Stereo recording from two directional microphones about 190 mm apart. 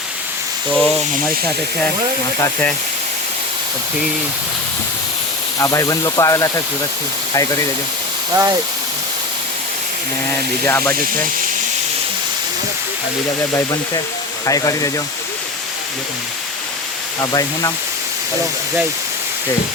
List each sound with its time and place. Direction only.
0.7 s speech: 5° left (ahead or behind)
2.4 s speech: 10° left (ahead or behind)
5.5 s speech: 15° left (ahead or behind)
8.3 s speech: 15° right (ahead or behind)
10.7 s speech: 10° left (ahead or behind)
13.5 s speech: 20° left (ahead or behind)
17.2 s speech: 20° left (ahead or behind)